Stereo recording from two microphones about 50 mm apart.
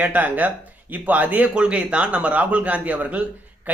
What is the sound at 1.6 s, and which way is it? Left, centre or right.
Speech, right.